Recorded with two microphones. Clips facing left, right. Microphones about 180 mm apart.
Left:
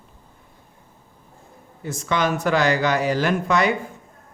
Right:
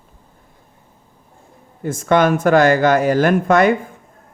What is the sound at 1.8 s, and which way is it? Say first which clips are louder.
Speech: right 8 dB; 50° right (ahead or behind).